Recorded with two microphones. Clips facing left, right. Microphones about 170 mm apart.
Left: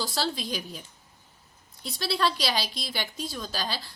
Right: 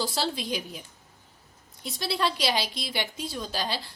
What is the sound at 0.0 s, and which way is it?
Speech, 25° right (ahead or behind).